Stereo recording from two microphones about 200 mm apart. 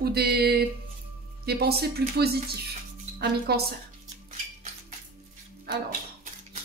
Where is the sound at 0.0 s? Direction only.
50° right (ahead or behind).